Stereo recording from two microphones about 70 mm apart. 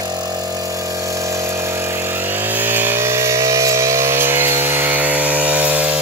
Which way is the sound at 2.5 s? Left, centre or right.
Right.